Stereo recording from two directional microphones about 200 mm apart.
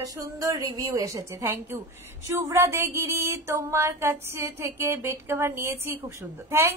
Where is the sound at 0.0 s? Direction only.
15° right (ahead or behind).